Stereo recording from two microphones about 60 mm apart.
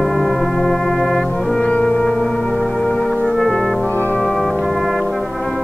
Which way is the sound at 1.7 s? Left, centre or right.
Centre.